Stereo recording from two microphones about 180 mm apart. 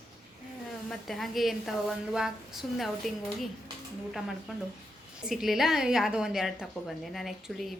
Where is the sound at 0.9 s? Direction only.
Centre (ahead or behind).